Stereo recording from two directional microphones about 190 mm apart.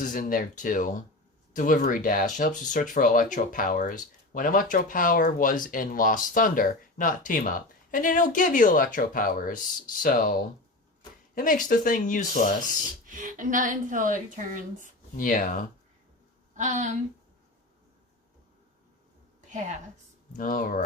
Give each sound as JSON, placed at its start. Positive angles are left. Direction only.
{"t": 0.0, "sound": "speech", "side_deg": 45}
{"t": 13.1, "sound": "a woman's voice", "side_deg": -45}
{"t": 15.2, "sound": "speech", "side_deg": 45}
{"t": 16.6, "sound": "speech", "side_deg": -40}
{"t": 20.3, "sound": "speech", "side_deg": 45}